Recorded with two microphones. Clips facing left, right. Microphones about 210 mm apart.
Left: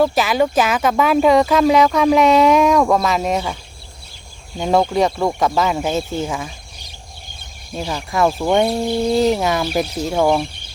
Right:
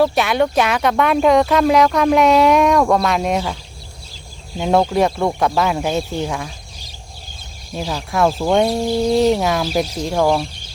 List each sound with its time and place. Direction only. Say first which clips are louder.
0.0 s speech: even; centre (ahead or behind)
7.8 s speech: even; centre (ahead or behind)